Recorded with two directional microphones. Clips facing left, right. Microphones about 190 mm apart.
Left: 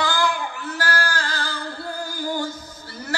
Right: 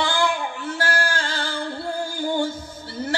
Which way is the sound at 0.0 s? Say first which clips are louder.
Right 1 dB; 25° right (ahead or behind).